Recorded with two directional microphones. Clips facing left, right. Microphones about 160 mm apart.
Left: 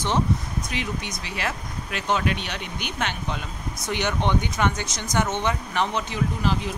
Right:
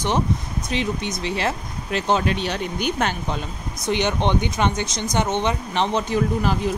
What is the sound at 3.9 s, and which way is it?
Speech, 20° right (ahead or behind).